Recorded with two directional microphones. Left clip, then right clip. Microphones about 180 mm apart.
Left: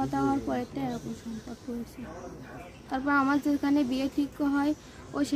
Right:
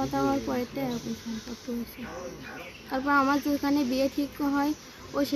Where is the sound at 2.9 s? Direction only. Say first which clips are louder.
Right 2 dB; 30° left (ahead or behind).